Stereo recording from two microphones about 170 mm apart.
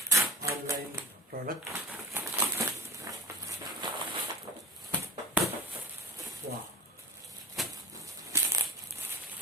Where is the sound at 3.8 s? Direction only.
25° right (ahead or behind).